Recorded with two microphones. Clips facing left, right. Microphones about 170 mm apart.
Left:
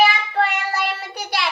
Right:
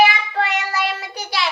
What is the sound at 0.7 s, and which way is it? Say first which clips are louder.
Child singing: right 1 dB; 55° left (ahead or behind).